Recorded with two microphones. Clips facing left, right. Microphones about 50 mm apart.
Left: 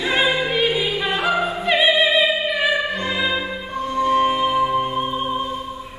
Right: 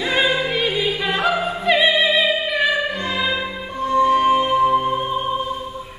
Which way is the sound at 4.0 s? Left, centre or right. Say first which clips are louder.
Right 2 dB; centre.